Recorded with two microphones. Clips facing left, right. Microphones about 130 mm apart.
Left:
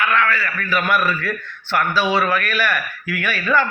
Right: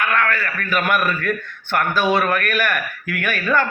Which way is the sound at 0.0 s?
50° right (ahead or behind).